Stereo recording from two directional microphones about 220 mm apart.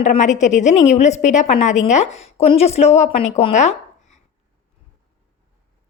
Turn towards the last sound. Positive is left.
turn(degrees=30)  # may be behind; listen again after turning